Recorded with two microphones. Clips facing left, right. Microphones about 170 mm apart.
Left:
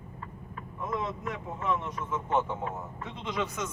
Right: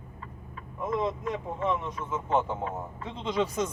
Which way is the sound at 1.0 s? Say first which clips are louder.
Right 5 dB; 30° right (ahead or behind).